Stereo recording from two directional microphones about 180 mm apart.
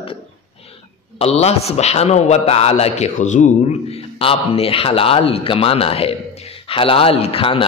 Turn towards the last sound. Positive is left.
turn(degrees=30)  # may be behind; listen again after turning